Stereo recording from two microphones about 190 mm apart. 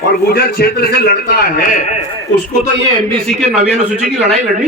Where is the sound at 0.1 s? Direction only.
55° left (ahead or behind).